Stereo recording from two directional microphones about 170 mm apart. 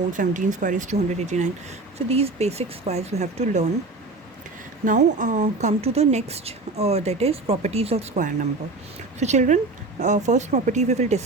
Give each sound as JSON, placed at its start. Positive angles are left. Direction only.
{"t": 0.1, "sound": "a woman's voice", "side_deg": -50}
{"t": 4.9, "sound": "a woman's voice", "side_deg": -50}